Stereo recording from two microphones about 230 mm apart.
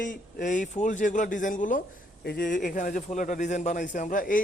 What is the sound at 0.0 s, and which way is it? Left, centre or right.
A man's voice, left.